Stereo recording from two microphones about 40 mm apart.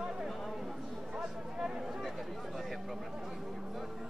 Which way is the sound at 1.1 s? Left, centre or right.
Centre.